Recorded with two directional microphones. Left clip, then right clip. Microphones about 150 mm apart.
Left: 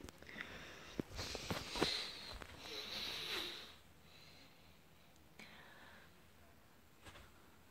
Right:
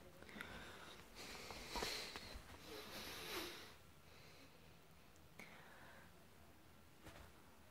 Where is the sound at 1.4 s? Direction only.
10° right (ahead or behind).